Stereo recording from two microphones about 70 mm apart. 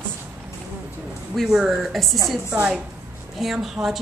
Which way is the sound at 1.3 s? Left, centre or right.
Centre.